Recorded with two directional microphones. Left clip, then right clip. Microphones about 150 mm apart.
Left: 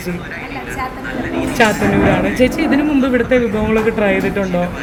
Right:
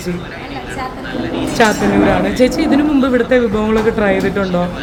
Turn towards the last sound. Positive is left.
turn(degrees=0)  # may be behind; listen again after turning